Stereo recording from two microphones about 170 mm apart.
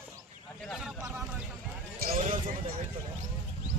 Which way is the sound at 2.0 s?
60° right (ahead or behind).